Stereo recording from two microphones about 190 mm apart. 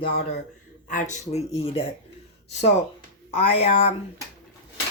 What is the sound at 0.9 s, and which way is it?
Speech, 40° left (ahead or behind).